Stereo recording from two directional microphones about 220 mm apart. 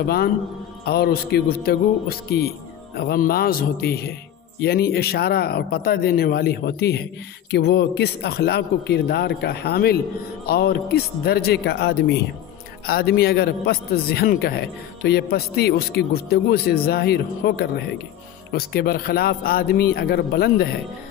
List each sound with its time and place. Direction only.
0.0 s a man's voice: 45° left (ahead or behind)